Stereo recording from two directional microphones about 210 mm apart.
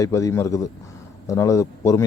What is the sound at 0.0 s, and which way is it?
Speech, 15° left (ahead or behind).